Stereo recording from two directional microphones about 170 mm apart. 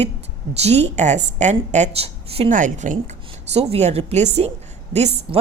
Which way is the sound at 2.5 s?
50° right (ahead or behind).